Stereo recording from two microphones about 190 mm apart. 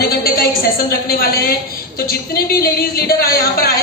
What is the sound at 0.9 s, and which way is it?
A woman's voice, 55° left (ahead or behind).